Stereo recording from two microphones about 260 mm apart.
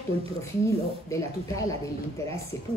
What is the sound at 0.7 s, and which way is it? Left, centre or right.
Speech, centre.